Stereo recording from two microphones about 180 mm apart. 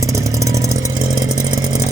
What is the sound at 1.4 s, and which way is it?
Chainsaw, 20° right (ahead or behind).